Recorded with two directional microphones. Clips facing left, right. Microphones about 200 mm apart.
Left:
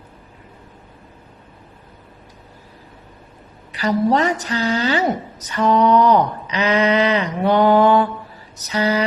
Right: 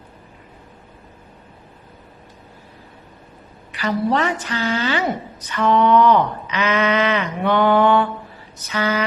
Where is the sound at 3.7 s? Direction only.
40° left (ahead or behind).